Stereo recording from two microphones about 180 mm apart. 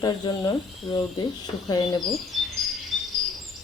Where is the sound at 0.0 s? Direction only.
25° left (ahead or behind).